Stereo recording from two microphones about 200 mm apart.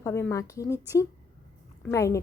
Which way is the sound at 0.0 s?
15° left (ahead or behind).